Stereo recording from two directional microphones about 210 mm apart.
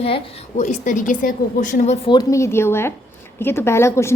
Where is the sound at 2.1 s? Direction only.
15° left (ahead or behind).